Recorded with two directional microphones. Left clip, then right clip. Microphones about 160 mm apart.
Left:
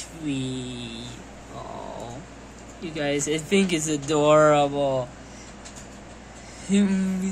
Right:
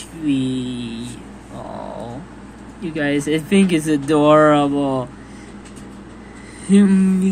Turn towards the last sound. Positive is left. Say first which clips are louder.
# right 8 dB
turn(degrees=0)  # may be behind; listen again after turning